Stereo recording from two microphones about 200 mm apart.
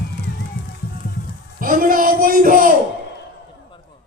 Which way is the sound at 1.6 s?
45° right (ahead or behind).